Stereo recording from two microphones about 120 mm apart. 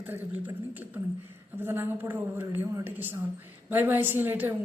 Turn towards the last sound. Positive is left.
turn(degrees=-15)  # may be behind; listen again after turning